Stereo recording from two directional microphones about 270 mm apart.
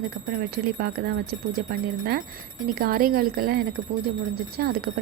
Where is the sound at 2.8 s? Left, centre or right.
Right.